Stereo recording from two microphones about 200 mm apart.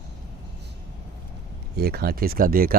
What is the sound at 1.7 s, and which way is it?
Speech, 50° right (ahead or behind).